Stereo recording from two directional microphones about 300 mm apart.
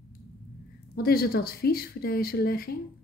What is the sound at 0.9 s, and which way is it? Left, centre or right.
Speech, left.